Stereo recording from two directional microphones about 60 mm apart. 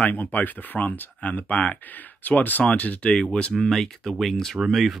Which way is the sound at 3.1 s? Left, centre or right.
Centre.